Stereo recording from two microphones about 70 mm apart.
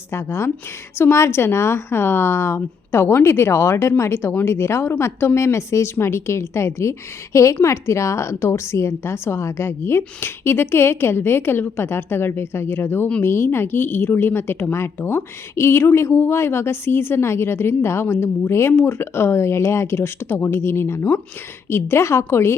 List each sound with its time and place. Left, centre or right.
0.1 s a woman's voice: left